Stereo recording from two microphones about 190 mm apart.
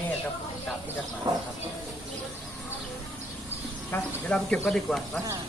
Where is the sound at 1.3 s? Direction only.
25° right (ahead or behind).